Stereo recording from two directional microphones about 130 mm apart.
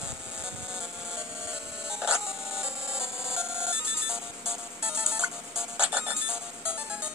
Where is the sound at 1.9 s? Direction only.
5° right (ahead or behind).